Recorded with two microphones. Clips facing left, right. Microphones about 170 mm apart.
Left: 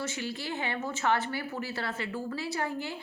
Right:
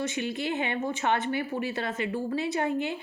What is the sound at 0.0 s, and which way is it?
A woman's voice, 20° right (ahead or behind).